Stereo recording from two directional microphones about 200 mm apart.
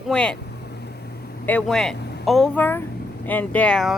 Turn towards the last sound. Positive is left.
turn(degrees=5)  # may be behind; listen again after turning